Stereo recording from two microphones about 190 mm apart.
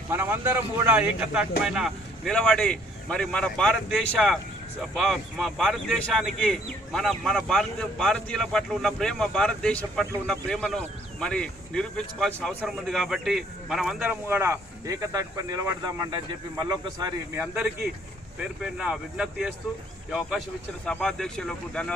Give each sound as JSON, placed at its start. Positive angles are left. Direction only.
{"t": 0.1, "sound": "a man's voice", "side_deg": -10}
{"t": 17.4, "sound": "a man's voice", "side_deg": -10}